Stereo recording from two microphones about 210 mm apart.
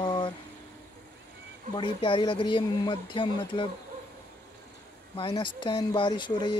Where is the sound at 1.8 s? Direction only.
25° left (ahead or behind).